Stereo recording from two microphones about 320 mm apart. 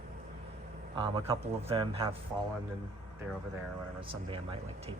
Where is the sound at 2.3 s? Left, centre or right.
Centre.